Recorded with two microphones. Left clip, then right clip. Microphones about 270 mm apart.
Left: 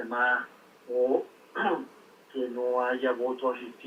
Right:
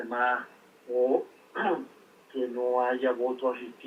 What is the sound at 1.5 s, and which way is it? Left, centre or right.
Speech, centre.